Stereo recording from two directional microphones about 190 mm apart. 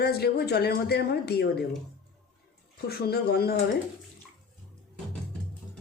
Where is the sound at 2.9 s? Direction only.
55° left (ahead or behind).